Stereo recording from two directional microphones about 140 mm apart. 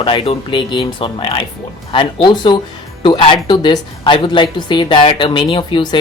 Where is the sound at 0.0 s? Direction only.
35° left (ahead or behind).